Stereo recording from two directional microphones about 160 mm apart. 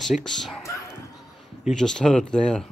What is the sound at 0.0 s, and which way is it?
Speech, centre (ahead or behind).